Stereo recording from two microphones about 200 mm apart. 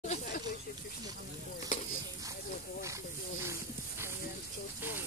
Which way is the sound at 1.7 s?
40° left (ahead or behind).